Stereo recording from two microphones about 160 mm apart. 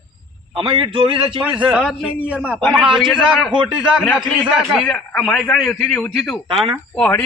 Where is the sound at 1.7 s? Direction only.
5° right (ahead or behind).